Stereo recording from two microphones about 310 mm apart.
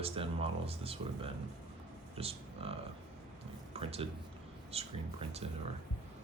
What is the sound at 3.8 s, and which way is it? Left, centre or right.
Speech, centre.